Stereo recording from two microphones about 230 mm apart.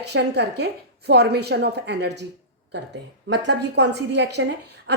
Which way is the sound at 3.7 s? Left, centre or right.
Right.